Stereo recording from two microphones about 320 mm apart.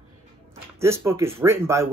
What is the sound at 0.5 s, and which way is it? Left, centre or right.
Speech, centre.